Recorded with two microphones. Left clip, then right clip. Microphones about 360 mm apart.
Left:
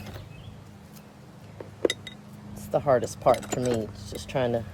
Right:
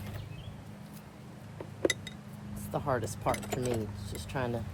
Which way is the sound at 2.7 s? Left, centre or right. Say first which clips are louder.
Left 10 dB; left.